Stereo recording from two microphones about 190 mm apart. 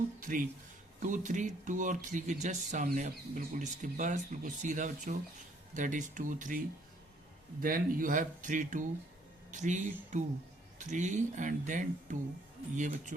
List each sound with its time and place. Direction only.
0.2 s speech: 45° right (ahead or behind)
7.6 s speech: 50° right (ahead or behind)